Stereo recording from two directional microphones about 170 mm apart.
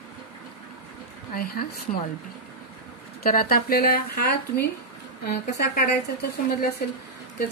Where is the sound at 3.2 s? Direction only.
60° left (ahead or behind).